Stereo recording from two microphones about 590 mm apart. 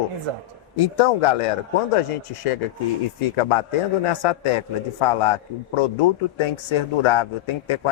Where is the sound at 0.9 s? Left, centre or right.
Left.